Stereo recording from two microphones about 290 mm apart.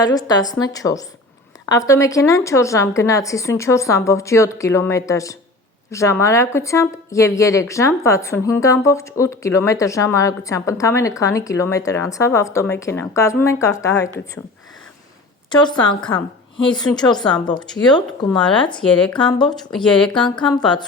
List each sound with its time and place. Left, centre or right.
0.0 s speech: centre
15.4 s speech: centre
18.8 s speech: centre
20.1 s speech: centre